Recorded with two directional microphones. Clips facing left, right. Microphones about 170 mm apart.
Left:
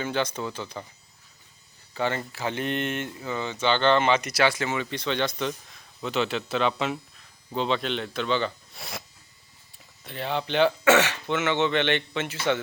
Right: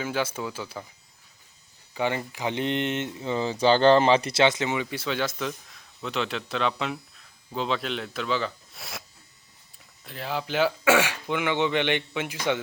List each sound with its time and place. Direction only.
0.0 s speech: 5° right (ahead or behind)
1.9 s speech: 15° right (ahead or behind)